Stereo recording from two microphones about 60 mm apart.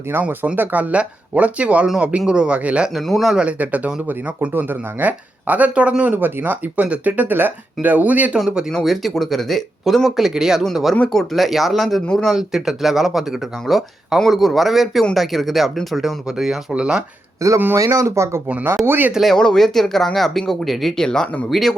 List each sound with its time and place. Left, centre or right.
0.1 s speech: right
2.9 s speech: centre
3.3 s speech: right
4.4 s speech: right
8.8 s speech: centre
12.4 s speech: centre
17.4 s speech: right
18.9 s speech: right
19.2 s speech: centre